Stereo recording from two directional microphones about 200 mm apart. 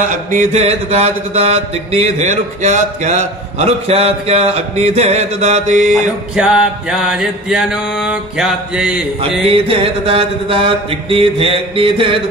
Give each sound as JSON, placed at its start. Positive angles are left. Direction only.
{"t": 0.3, "sound": "a sound", "side_deg": -35}
{"t": 6.3, "sound": "mantra", "side_deg": -5}
{"t": 9.5, "sound": "mantra", "side_deg": -30}